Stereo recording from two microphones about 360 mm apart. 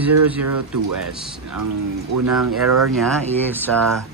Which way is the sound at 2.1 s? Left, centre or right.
Right.